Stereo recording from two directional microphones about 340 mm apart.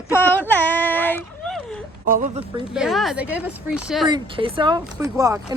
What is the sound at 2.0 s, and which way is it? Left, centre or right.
Speech, right.